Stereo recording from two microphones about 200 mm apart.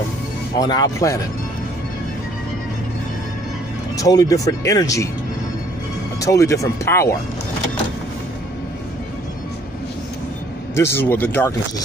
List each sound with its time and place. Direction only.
0.6 s speech: 20° left (ahead or behind)
3.9 s speech: 15° left (ahead or behind)
6.2 s speech: 15° left (ahead or behind)
10.7 s speech: 10° left (ahead or behind)